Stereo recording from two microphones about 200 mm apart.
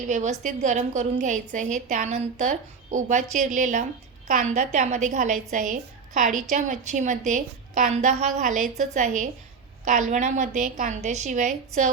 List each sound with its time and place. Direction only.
0.0 s a woman's voice: 35° right (ahead or behind)